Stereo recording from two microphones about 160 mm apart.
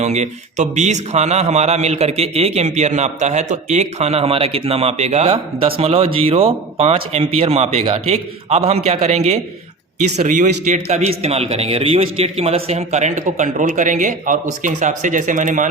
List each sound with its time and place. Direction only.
0.0 s a man's voice: 45° right (ahead or behind)